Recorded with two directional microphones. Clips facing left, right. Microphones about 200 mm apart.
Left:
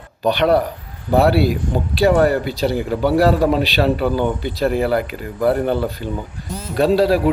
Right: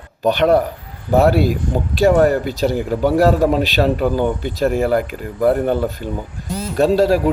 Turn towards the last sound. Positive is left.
turn(degrees=-45)  # may be behind; listen again after turning